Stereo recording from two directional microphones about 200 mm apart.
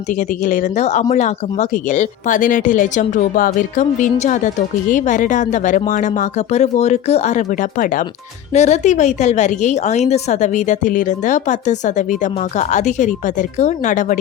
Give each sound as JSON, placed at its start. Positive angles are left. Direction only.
{"t": 0.4, "sound": "speech", "side_deg": 40}